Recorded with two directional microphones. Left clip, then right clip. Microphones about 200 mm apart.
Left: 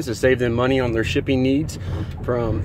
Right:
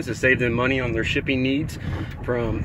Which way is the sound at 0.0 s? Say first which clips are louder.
Left 1 dB; 15° left (ahead or behind).